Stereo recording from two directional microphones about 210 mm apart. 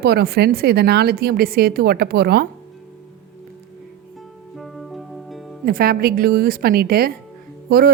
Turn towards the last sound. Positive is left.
turn(degrees=-45)  # may be behind; listen again after turning